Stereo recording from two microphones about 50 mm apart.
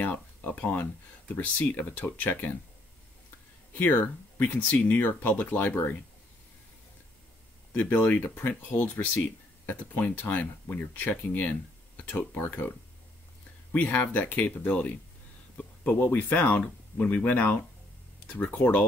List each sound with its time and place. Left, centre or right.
0.0 s speech: left
3.7 s speech: left
7.7 s speech: left
12.0 s a sound: left
12.4 s speech: left